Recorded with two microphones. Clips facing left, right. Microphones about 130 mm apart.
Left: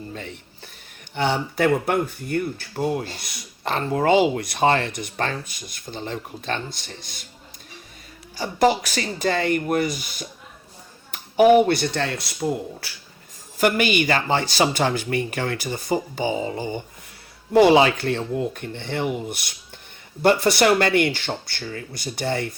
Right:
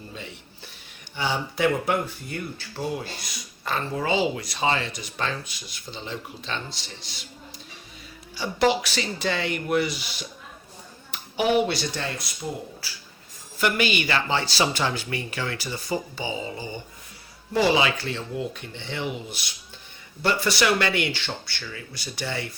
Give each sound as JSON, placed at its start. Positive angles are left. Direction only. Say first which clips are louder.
{"t": 0.1, "sound": "speech", "louder": "left 4 dB", "side_deg": 50}
{"t": 8.4, "sound": "speech", "louder": "left 3 dB", "side_deg": 45}
{"t": 13.6, "sound": "speech", "louder": "left 4 dB", "side_deg": 45}